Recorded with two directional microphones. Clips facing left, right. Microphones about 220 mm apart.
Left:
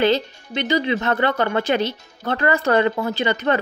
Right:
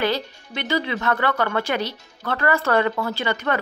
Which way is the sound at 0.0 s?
20° left (ahead or behind).